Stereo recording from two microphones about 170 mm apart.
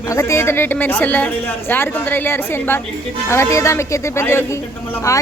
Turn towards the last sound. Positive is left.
turn(degrees=20)  # may be behind; listen again after turning